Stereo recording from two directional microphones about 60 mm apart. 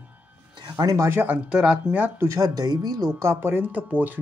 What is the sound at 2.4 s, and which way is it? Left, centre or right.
Speech, right.